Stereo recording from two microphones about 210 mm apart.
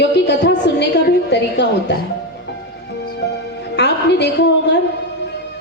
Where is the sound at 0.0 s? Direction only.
55° left (ahead or behind).